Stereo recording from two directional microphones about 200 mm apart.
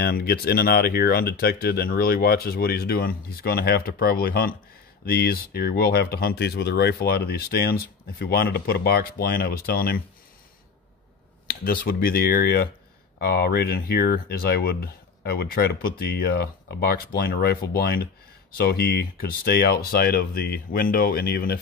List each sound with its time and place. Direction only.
0.0 s speech: 50° left (ahead or behind)
11.6 s speech: 50° left (ahead or behind)